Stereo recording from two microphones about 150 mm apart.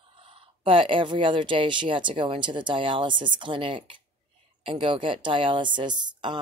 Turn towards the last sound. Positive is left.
turn(degrees=-30)  # may be behind; listen again after turning